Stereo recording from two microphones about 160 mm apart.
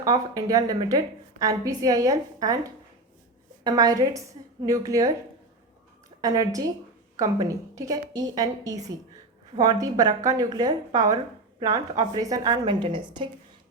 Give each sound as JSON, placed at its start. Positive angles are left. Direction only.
{"t": 0.0, "sound": "a woman's voice", "side_deg": -25}
{"t": 6.2, "sound": "a woman's voice", "side_deg": -20}